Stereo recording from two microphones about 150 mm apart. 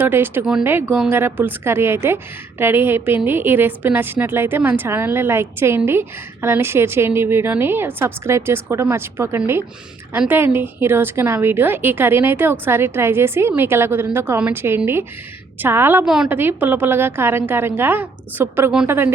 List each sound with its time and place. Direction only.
0.0 s a woman's voice: 15° right (ahead or behind)